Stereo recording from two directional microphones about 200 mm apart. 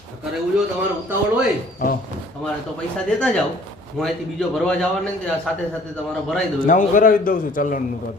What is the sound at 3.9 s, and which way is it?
A man's voice, centre (ahead or behind).